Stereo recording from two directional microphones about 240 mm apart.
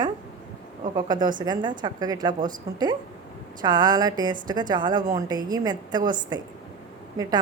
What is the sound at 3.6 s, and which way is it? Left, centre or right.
A woman's voice, centre.